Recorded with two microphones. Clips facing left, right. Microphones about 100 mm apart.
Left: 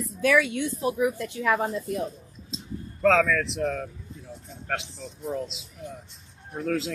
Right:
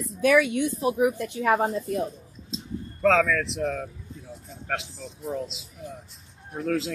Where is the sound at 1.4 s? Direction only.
30° right (ahead or behind).